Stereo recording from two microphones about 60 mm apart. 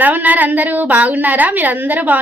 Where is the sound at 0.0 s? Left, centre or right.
Right.